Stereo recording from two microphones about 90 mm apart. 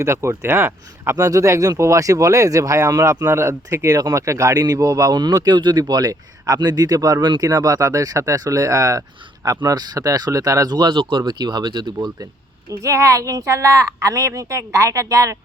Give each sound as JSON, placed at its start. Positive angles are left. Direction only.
{"t": 0.0, "sound": "speech", "side_deg": -30}
{"t": 1.1, "sound": "speech", "side_deg": -40}
{"t": 5.1, "sound": "speech", "side_deg": -50}
{"t": 12.7, "sound": "speech", "side_deg": -35}